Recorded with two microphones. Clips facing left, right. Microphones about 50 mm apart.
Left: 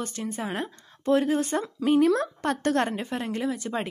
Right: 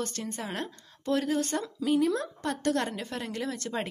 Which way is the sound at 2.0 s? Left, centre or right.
Left.